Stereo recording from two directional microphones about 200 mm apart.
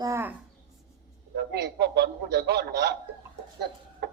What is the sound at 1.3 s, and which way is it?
A man's voice, 55° right (ahead or behind).